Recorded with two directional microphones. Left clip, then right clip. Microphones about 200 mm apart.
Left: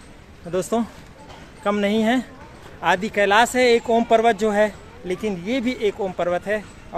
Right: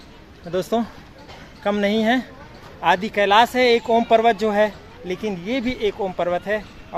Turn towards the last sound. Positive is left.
turn(degrees=0)  # may be behind; listen again after turning